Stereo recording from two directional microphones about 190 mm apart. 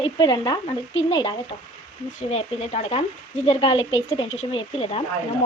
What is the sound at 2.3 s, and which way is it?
Speech, 35° left (ahead or behind).